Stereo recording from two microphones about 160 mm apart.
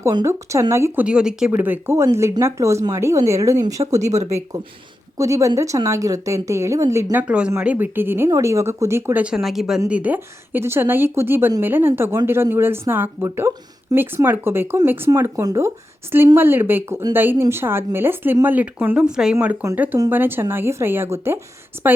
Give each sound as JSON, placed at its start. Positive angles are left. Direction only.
{"t": 0.0, "sound": "a woman's voice", "side_deg": -20}
{"t": 1.0, "sound": "a woman's voice", "side_deg": -5}
{"t": 3.9, "sound": "speech", "side_deg": -45}
{"t": 4.3, "sound": "a woman's voice", "side_deg": -20}